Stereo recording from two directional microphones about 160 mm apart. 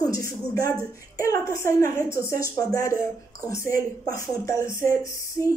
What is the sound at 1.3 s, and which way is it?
Speech, 20° left (ahead or behind).